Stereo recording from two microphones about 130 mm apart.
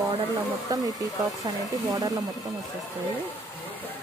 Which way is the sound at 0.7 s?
30° right (ahead or behind).